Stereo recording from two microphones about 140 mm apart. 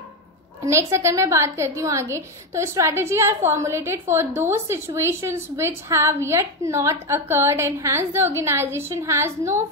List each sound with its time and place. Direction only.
0.7 s a woman's voice: 20° right (ahead or behind)